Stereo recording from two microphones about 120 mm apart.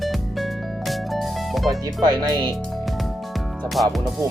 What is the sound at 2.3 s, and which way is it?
Speech, 40° right (ahead or behind).